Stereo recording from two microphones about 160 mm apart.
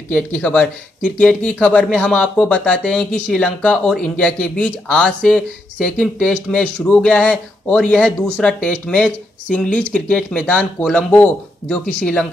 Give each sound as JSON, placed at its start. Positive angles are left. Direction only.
{"t": 0.1, "sound": "speech", "side_deg": 10}